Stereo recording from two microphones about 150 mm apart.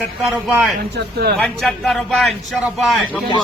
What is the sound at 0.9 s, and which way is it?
Speech, 90° right.